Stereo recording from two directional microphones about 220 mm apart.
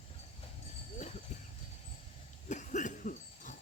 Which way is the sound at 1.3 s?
35° left (ahead or behind).